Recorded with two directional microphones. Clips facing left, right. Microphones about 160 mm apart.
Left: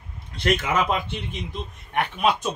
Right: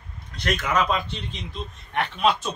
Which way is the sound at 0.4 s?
25° left (ahead or behind).